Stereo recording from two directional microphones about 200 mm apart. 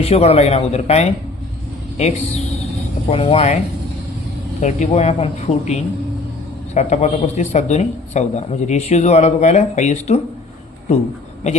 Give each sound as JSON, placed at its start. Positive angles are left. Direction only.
{"t": 0.0, "sound": "speech", "side_deg": 30}
{"t": 4.6, "sound": "speech", "side_deg": 35}